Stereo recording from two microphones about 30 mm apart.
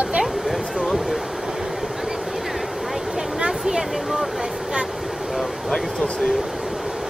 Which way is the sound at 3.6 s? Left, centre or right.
Centre.